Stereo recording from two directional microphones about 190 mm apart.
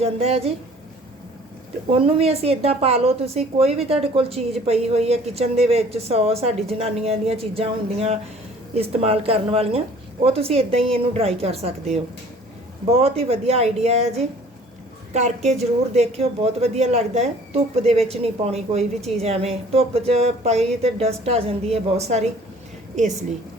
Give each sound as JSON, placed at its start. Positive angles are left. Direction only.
{"t": 0.0, "sound": "a woman's voice", "side_deg": -30}
{"t": 1.9, "sound": "a woman's voice", "side_deg": -30}
{"t": 15.1, "sound": "a woman's voice", "side_deg": -35}